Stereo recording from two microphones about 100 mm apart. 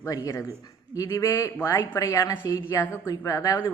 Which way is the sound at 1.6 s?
20° left (ahead or behind).